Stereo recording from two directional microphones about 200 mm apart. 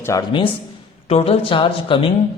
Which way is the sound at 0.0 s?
15° left (ahead or behind).